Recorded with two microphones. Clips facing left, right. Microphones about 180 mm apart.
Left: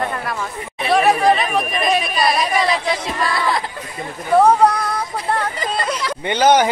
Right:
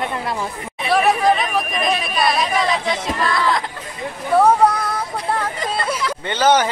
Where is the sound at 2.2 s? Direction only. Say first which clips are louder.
Left 1 dB; centre (ahead or behind).